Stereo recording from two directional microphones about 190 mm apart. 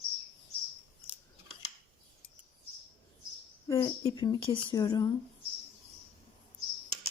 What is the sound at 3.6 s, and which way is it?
Speech, 20° left (ahead or behind).